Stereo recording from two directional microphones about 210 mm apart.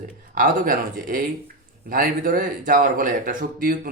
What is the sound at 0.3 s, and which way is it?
Speech, 40° right (ahead or behind).